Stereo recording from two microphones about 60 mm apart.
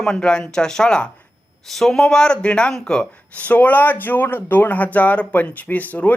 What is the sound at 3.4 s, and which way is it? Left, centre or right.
Speech, left.